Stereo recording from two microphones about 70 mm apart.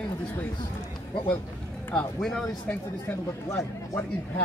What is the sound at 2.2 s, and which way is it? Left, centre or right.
Speech, centre.